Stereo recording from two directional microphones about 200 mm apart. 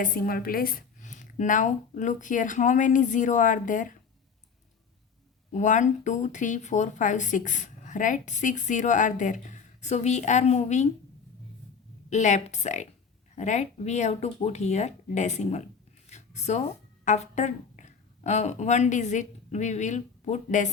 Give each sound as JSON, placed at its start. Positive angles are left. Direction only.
{"t": 0.0, "sound": "speech", "side_deg": 45}
{"t": 5.5, "sound": "speech", "side_deg": 40}
{"t": 12.1, "sound": "speech", "side_deg": 35}
{"t": 16.0, "sound": "a sound", "side_deg": 35}
{"t": 17.1, "sound": "a woman's voice", "side_deg": 35}